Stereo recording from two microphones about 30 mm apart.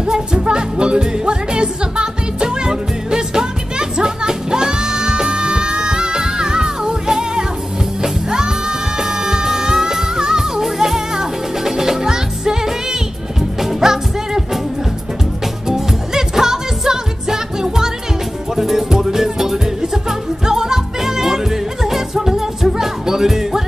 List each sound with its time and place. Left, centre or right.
0.0 s music: right
15.7 s music: centre